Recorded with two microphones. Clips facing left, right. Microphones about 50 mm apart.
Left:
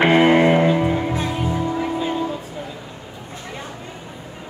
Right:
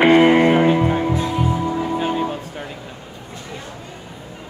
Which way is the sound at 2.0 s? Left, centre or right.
Right.